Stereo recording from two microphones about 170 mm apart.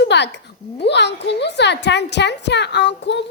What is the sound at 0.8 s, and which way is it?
A woman's voice, 90° left.